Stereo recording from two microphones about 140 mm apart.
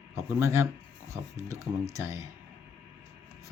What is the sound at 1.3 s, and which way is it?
Speech, 20° right (ahead or behind).